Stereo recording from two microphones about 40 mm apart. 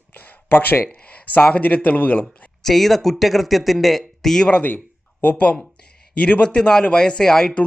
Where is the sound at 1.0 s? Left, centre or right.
Left.